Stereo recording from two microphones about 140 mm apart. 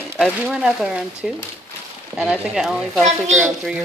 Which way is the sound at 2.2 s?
5° right (ahead or behind).